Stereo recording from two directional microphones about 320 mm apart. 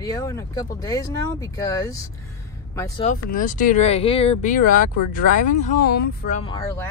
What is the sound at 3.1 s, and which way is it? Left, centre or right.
Speech, left.